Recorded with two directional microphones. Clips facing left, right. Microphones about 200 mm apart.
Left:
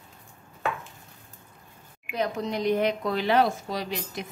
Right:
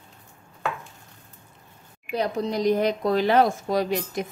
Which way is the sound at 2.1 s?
35° right (ahead or behind).